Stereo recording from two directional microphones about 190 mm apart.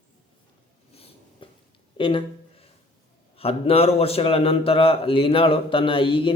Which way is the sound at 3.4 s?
30° left (ahead or behind).